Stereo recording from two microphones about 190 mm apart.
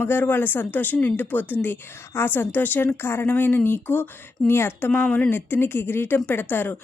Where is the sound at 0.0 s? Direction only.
10° left (ahead or behind).